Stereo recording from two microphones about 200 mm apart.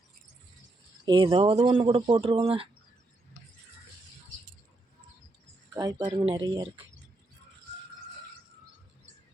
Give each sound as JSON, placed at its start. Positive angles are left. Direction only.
{"t": 1.0, "sound": "speech", "side_deg": -25}
{"t": 5.7, "sound": "speech", "side_deg": -20}